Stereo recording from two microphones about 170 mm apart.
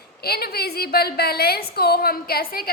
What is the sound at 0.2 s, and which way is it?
A woman's voice, 65° left (ahead or behind).